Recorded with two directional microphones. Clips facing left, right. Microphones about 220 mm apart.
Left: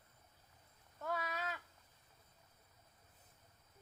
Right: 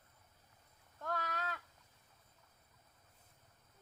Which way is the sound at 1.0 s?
5° left (ahead or behind).